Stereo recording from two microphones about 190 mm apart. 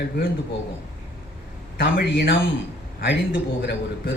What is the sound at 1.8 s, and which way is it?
Speech, 50° left (ahead or behind).